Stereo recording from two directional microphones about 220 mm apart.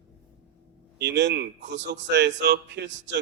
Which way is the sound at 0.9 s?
50° right (ahead or behind).